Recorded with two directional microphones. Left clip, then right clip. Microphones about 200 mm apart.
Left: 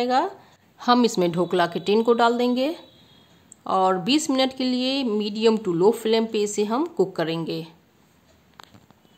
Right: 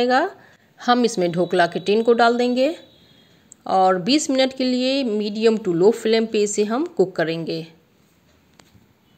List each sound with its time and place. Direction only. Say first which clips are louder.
0.0 s a woman's voice: right 3 dB; 10° right (ahead or behind)
0.9 s speech: right 1 dB; centre (ahead or behind)